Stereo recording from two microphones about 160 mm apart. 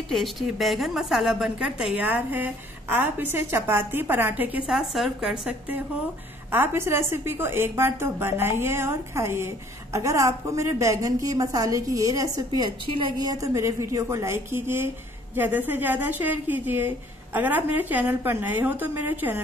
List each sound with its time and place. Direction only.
0.1 s a woman's voice: centre (ahead or behind); by 12.6 s 20° right (ahead or behind)
12.8 s a woman's voice: 35° right (ahead or behind); by 19.4 s 10° right (ahead or behind)